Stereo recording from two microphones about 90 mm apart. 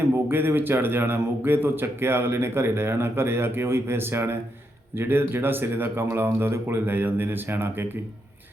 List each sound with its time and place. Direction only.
0.0 s speech: 25° right (ahead or behind)